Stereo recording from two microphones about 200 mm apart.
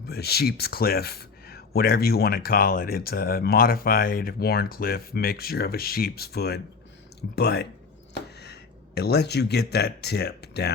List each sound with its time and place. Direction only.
0.1 s speech: 50° left (ahead or behind)
9.0 s speech: 55° left (ahead or behind)